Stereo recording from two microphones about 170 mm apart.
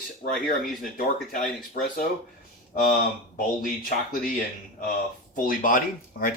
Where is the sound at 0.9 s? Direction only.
50° left (ahead or behind).